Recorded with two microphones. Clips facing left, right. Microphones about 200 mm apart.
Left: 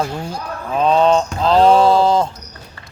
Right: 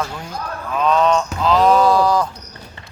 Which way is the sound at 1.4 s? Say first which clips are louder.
Left 2 dB; 30° left (ahead or behind).